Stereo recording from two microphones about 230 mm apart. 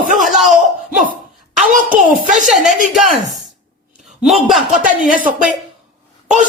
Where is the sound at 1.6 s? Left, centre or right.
Right.